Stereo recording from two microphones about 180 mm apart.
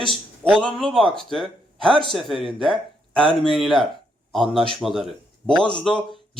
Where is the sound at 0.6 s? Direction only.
Centre (ahead or behind).